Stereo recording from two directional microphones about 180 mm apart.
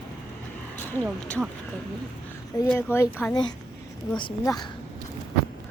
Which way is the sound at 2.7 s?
15° left (ahead or behind).